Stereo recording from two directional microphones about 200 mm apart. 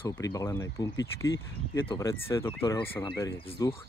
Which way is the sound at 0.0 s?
15° left (ahead or behind).